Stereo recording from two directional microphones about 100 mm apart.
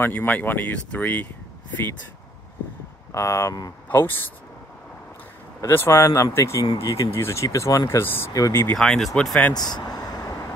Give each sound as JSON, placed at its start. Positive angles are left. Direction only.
{"t": 0.0, "sound": "speech", "side_deg": 20}
{"t": 3.1, "sound": "speech", "side_deg": 30}
{"t": 5.6, "sound": "speech", "side_deg": 30}
{"t": 7.1, "sound": "speech", "side_deg": 25}
{"t": 8.0, "sound": "speech", "side_deg": 20}
{"t": 8.3, "sound": "speech", "side_deg": 35}
{"t": 8.7, "sound": "speech", "side_deg": 5}
{"t": 9.5, "sound": "vehicle", "side_deg": 45}